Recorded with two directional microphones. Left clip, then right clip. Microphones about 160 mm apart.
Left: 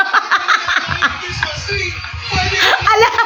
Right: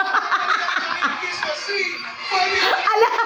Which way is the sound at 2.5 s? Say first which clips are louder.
Left 8 dB; 20° left (ahead or behind).